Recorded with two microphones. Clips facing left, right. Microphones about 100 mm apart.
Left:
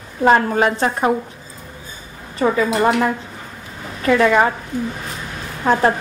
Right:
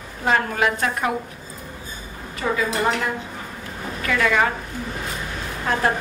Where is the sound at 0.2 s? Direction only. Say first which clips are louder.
Left 6 dB; 35° left (ahead or behind).